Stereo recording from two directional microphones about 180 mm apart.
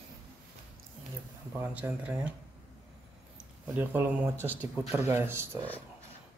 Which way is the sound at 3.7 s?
10° right (ahead or behind).